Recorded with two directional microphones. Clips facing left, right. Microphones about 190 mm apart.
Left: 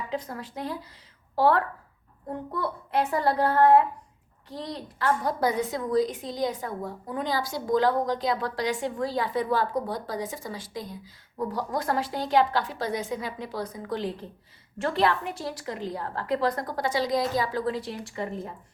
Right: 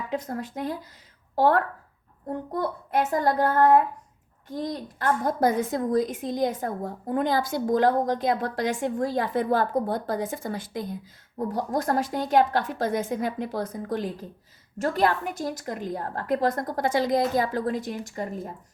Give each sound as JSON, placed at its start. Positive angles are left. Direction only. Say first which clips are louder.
{"t": 0.1, "sound": "a woman's voice", "louder": "right 3 dB", "side_deg": -45}